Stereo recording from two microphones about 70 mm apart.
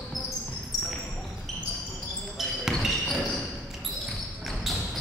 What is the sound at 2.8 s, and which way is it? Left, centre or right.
Basketball bounce, centre.